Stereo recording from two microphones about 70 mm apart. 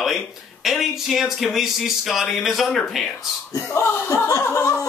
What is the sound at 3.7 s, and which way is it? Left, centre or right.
Speech, left.